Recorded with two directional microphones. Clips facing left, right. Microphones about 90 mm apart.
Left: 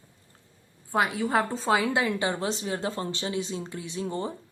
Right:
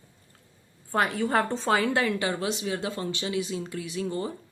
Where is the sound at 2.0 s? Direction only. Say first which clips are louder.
Even; 20° left (ahead or behind).